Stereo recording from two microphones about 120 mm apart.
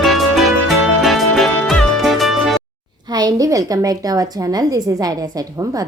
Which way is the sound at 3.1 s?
35° right (ahead or behind).